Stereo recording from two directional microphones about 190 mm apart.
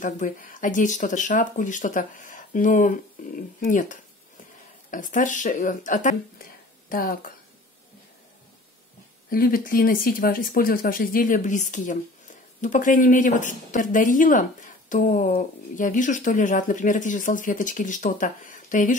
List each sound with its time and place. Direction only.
0.0 s speech: 45° left (ahead or behind)
9.3 s speech: 50° left (ahead or behind)